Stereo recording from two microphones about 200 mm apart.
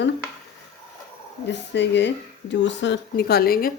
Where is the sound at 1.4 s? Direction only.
60° left (ahead or behind).